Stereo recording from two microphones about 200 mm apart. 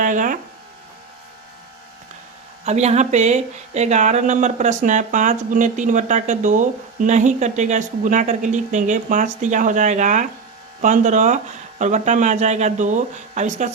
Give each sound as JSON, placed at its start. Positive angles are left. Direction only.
{"t": 0.0, "sound": "speech", "side_deg": -40}
{"t": 2.6, "sound": "speech", "side_deg": -35}